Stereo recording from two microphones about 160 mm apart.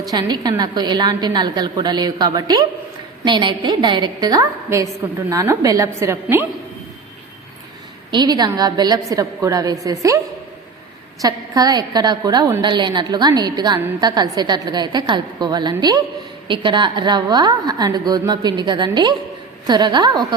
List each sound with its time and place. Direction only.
0.1 s a woman's voice: 25° right (ahead or behind)
8.1 s a woman's voice: 25° right (ahead or behind)
11.2 s a woman's voice: 25° right (ahead or behind)